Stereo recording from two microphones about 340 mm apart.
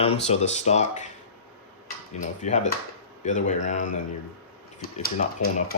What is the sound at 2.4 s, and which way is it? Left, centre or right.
Speech, centre.